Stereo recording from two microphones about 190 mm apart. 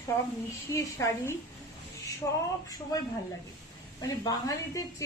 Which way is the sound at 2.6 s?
20° left (ahead or behind).